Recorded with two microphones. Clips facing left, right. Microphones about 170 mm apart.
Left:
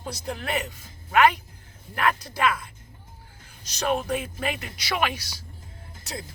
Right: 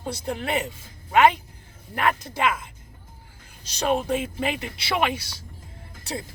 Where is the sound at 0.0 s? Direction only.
30° right (ahead or behind).